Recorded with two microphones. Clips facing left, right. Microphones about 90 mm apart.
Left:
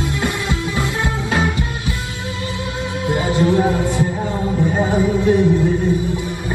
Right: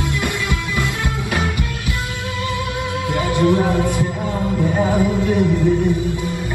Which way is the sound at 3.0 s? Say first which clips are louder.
Even; 20° left (ahead or behind).